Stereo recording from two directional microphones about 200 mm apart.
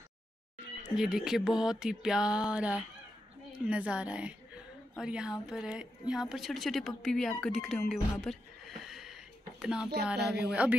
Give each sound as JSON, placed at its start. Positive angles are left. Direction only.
{"t": 0.9, "sound": "speech", "side_deg": 0}
{"t": 10.2, "sound": "speech", "side_deg": -55}
{"t": 10.5, "sound": "a man's voice", "side_deg": -5}